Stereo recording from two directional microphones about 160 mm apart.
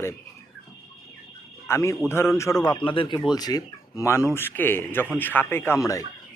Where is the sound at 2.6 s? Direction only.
25° left (ahead or behind).